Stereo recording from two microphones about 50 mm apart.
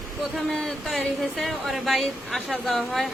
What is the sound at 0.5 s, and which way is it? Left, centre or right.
Speech, centre.